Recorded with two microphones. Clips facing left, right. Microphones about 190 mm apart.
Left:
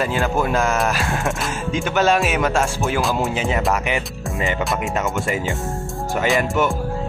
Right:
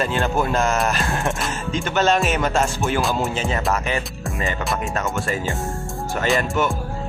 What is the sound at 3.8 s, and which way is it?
Speech, 15° left (ahead or behind).